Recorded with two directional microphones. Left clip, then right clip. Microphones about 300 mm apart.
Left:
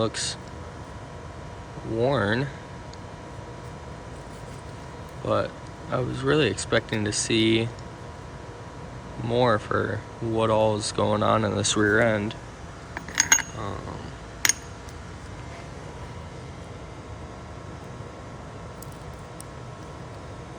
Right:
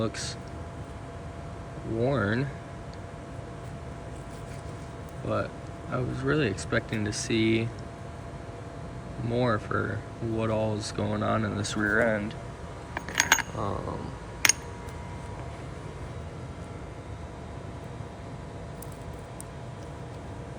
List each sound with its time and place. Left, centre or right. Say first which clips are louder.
0.0 s speech: left 5 dB; centre
2.0 s speech: left 4 dB; centre
5.2 s speech: left 5 dB; centre
9.3 s speech: left 5 dB; centre
11.8 s speech: left 3 dB; right
12.9 s coin: left 2 dB; centre